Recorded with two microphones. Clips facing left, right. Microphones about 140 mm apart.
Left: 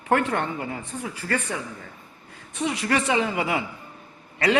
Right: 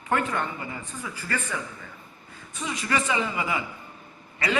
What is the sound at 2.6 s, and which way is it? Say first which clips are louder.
A man's voice: left 4 dB; 65° left (ahead or behind).